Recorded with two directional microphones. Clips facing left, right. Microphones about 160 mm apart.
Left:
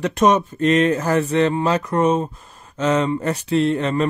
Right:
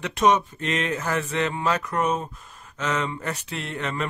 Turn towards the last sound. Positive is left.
turn(degrees=35)  # may be behind; listen again after turning